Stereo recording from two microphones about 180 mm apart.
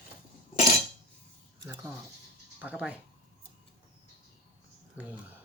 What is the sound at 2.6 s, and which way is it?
Speech, 5° right (ahead or behind).